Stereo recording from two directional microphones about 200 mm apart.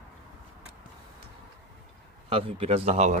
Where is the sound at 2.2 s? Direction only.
30° right (ahead or behind).